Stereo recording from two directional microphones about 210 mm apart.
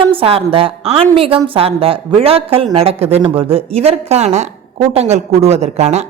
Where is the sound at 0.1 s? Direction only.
25° right (ahead or behind).